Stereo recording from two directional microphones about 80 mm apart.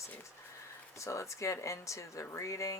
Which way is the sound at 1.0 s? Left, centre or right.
Left.